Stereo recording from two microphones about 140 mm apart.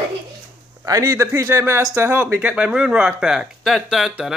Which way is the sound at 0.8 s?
20° right (ahead or behind).